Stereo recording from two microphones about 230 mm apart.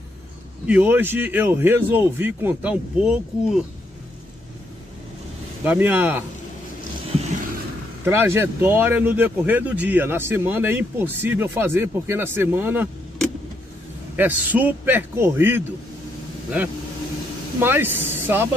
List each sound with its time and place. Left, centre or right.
0.7 s speech: centre
5.6 s speech: centre
7.2 s a sound: right
8.0 s speech: centre
14.1 s speech: centre
17.6 s speech: centre